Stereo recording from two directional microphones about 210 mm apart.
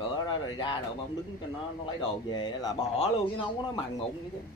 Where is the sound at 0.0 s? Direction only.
20° left (ahead or behind).